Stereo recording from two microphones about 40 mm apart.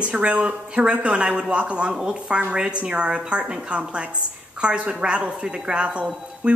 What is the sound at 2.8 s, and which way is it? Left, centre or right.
A woman's voice, right.